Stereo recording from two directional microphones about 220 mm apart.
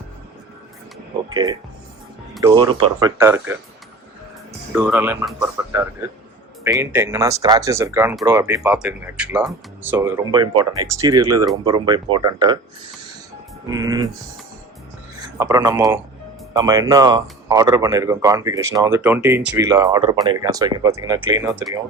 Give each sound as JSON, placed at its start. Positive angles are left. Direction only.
{"t": 1.3, "sound": "speech", "side_deg": -20}
{"t": 4.7, "sound": "speech", "side_deg": -5}
{"t": 13.7, "sound": "speech", "side_deg": -15}
{"t": 15.4, "sound": "speech", "side_deg": -15}